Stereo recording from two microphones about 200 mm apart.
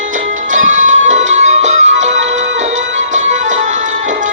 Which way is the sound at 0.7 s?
40° right (ahead or behind).